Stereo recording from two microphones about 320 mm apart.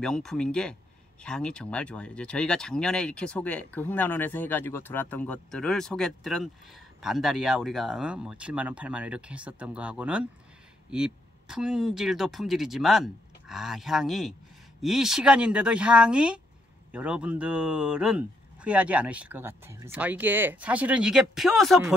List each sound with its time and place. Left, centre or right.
0.0 s speech: centre